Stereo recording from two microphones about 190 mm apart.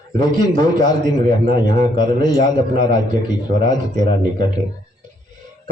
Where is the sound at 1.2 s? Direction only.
20° left (ahead or behind).